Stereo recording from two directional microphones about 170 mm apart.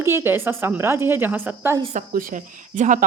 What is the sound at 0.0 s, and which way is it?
Speech, 15° right (ahead or behind).